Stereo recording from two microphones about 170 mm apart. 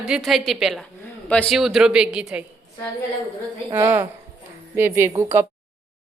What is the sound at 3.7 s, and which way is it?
Speech, 15° right (ahead or behind).